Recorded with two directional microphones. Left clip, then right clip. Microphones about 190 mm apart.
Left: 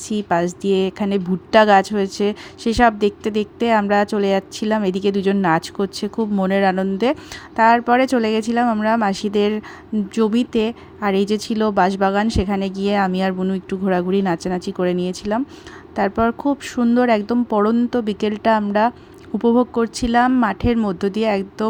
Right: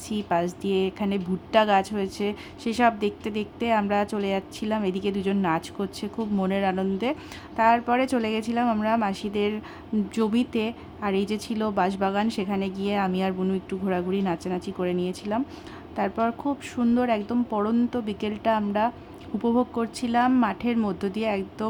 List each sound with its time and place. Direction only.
0.1 s a woman's voice: 30° left (ahead or behind)